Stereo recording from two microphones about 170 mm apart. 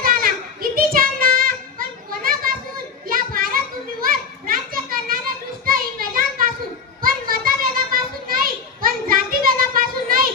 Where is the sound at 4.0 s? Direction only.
60° right (ahead or behind).